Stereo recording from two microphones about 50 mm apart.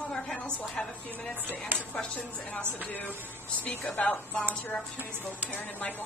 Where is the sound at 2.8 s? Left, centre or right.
Left.